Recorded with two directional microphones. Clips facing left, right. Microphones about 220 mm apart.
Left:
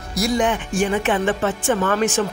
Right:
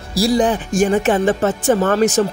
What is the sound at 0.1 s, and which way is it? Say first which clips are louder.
Speech: right 4 dB; 35° right (ahead or behind).